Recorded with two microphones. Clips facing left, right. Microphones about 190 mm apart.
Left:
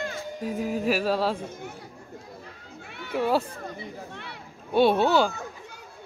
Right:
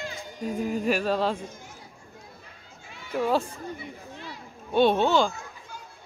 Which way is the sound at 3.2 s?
10° left (ahead or behind).